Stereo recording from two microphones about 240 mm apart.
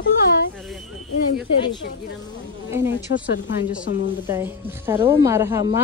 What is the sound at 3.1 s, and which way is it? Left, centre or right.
Speech, left.